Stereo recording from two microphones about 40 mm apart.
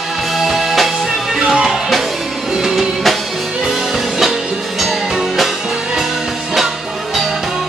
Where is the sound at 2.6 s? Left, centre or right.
Centre.